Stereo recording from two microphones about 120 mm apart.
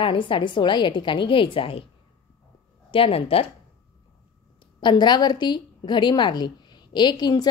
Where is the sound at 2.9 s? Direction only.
50° left (ahead or behind).